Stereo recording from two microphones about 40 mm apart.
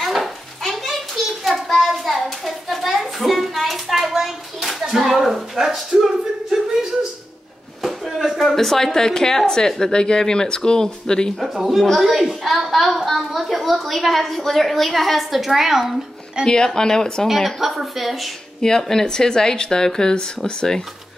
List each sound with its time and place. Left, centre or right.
0.0 s a sound: centre
8.5 s speech: centre
11.3 s a woman's voice: centre
16.4 s speech: centre
17.6 s a woman's voice: centre
18.6 s speech: centre